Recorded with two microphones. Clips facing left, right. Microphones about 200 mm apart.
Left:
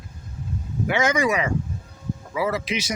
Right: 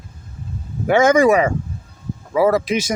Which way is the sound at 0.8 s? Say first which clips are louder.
Right 9 dB; 50° right (ahead or behind).